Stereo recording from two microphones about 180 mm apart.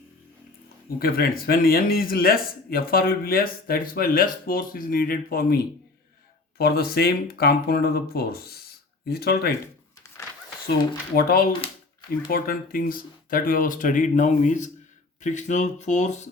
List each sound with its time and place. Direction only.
0.9 s a man's voice: 55° left (ahead or behind)
6.6 s a man's voice: 60° left (ahead or behind)
11.1 s a man's voice: 55° left (ahead or behind); by 16.3 s 40° left (ahead or behind)